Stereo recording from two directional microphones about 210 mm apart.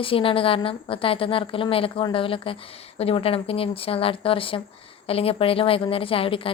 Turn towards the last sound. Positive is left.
turn(degrees=25)  # may be behind; listen again after turning